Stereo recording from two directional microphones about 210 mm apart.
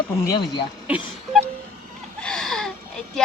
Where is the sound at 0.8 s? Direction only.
5° right (ahead or behind).